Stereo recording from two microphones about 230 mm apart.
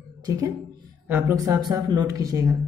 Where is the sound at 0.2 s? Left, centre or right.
Centre.